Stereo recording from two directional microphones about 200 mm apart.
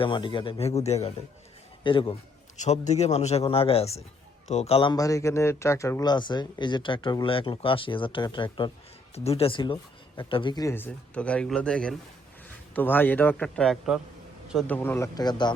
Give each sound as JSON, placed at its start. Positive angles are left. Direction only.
{"t": 0.0, "sound": "speech", "side_deg": 25}
{"t": 2.6, "sound": "a man's voice", "side_deg": 35}